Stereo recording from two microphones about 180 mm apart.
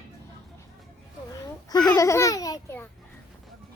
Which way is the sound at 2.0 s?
15° left (ahead or behind).